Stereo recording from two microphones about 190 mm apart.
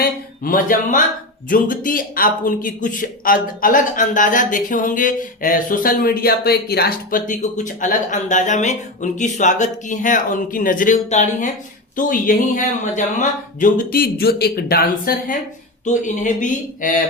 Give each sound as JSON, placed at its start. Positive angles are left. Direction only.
{"t": 0.0, "sound": "a man's voice", "side_deg": 45}